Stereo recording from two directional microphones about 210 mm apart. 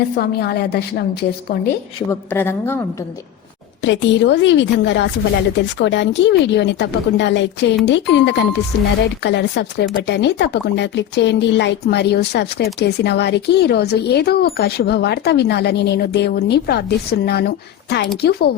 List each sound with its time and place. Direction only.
0.2 s speech: 50° left (ahead or behind)
1.6 s a woman's voice: 10° left (ahead or behind)
3.8 s speech: 60° left (ahead or behind)